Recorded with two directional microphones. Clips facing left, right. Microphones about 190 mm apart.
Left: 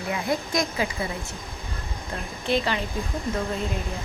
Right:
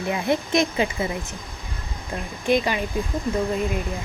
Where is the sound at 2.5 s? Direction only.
15° right (ahead or behind).